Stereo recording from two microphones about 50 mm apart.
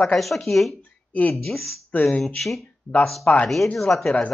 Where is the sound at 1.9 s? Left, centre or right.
Left.